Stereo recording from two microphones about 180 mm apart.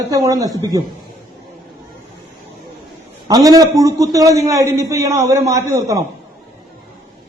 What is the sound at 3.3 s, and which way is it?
A man's voice, 20° right (ahead or behind).